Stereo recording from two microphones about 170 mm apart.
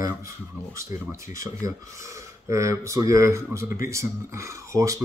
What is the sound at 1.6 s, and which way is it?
Speech, 20° right (ahead or behind).